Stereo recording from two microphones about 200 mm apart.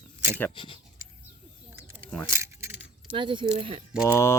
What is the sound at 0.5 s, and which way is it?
Speech, 25° left (ahead or behind).